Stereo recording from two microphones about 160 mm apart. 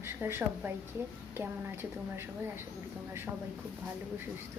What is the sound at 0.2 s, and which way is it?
A woman's voice, 15° right (ahead or behind).